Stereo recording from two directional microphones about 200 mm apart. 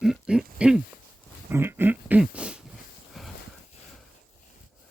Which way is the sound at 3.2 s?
Centre (ahead or behind).